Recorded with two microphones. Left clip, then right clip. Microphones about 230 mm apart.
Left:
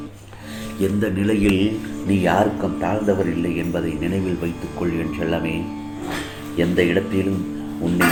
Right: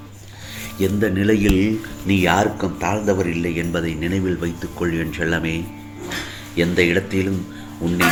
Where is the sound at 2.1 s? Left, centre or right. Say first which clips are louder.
Right 1 dB; right.